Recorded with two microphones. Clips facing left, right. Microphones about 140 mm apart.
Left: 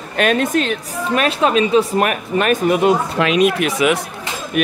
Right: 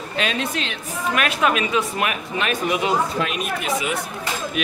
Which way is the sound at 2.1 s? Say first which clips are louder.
Left 7 dB; 50° left (ahead or behind).